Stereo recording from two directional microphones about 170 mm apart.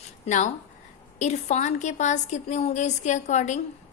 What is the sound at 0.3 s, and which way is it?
A woman's voice, 45° left (ahead or behind).